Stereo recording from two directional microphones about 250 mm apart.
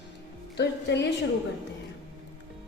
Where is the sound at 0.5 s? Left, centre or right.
Left.